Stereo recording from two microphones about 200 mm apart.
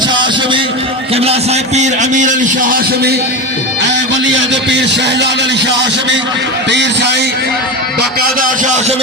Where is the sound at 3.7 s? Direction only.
65° right (ahead or behind).